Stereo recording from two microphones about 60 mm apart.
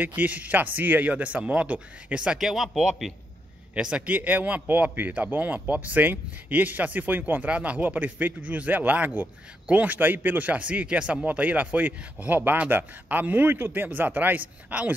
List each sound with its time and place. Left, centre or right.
0.0 s speech: right
2.3 s speech: centre
3.7 s speech: centre